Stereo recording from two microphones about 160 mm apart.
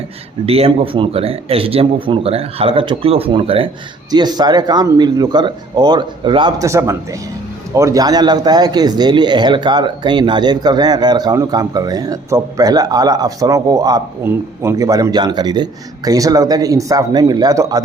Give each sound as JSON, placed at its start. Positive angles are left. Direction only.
{"t": 0.4, "sound": "speech", "side_deg": -40}
{"t": 6.7, "sound": "speech", "side_deg": -20}